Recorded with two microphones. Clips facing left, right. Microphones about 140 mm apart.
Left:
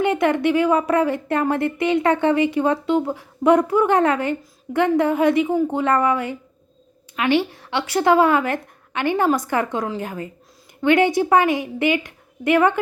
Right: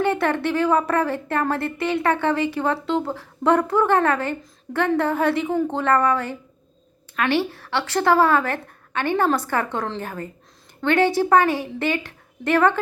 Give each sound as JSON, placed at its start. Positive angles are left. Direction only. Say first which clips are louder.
{"t": 0.0, "sound": "speech", "louder": "left 3 dB", "side_deg": 15}